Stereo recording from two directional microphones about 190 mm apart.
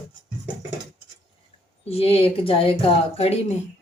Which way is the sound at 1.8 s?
30° left (ahead or behind).